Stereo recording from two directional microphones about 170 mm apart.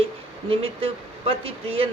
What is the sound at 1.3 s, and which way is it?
Speech, 35° right (ahead or behind).